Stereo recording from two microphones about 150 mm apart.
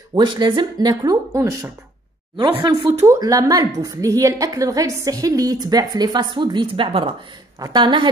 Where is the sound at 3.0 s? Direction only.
20° right (ahead or behind).